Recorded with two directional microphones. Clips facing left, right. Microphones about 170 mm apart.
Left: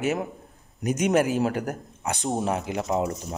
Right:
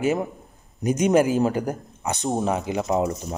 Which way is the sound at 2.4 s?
Centre (ahead or behind).